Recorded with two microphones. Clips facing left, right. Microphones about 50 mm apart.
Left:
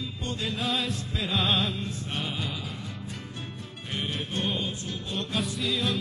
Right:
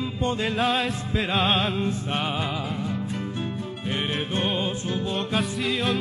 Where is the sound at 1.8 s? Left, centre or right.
Right.